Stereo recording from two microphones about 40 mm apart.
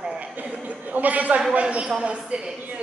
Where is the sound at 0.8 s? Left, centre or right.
Right.